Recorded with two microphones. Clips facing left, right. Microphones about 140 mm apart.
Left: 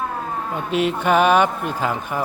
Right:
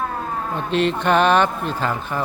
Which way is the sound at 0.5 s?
10° left (ahead or behind).